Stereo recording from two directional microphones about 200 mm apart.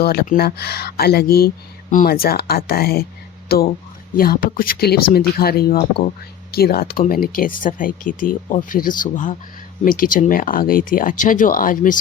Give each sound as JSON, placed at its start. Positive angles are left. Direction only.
{"t": 0.0, "sound": "speech", "side_deg": 50}